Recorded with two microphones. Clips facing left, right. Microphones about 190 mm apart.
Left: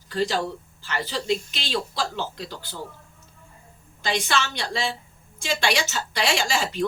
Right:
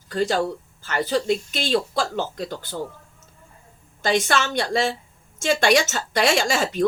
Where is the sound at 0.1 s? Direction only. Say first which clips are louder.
Right 3 dB; 50° right (ahead or behind).